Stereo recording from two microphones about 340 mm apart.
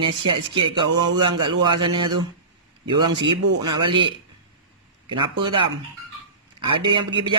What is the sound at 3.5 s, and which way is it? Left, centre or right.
Speech, right.